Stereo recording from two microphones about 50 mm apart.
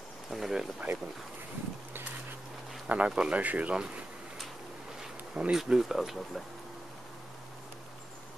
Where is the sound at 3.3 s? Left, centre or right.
Right.